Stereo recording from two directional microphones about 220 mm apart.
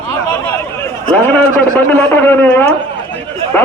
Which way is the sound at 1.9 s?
10° left (ahead or behind).